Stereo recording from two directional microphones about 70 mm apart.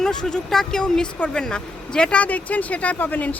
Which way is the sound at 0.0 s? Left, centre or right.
Centre.